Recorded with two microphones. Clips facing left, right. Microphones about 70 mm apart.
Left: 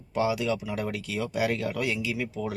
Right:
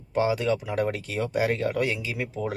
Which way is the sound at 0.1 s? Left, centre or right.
Right.